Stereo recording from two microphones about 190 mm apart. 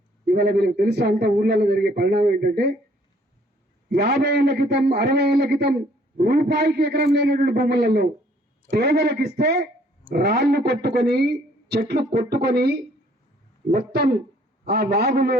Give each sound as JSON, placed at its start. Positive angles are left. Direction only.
{"t": 0.3, "sound": "a man's voice", "side_deg": -55}
{"t": 3.8, "sound": "a man's voice", "side_deg": -55}